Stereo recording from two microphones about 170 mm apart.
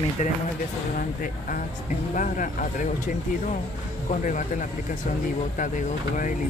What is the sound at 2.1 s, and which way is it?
Speech, 50° left (ahead or behind).